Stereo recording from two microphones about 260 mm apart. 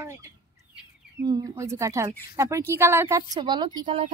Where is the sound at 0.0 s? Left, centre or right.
Centre.